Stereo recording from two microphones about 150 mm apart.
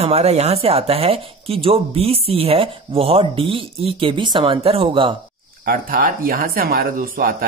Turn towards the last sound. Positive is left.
turn(degrees=-75)  # may be behind; listen again after turning